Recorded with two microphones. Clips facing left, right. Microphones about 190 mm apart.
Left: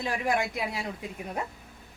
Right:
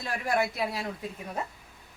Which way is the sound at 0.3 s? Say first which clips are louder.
Right 2 dB; 15° left (ahead or behind).